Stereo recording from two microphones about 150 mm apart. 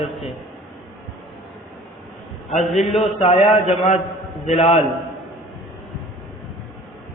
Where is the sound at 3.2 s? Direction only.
45° left (ahead or behind).